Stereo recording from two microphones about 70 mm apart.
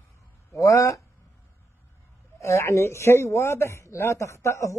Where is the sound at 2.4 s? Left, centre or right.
Left.